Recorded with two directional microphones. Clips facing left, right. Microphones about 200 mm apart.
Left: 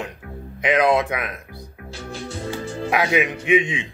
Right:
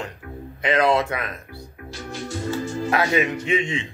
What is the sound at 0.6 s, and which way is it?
Speech, 15° left (ahead or behind).